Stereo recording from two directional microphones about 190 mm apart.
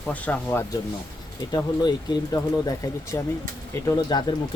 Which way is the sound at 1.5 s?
20° left (ahead or behind).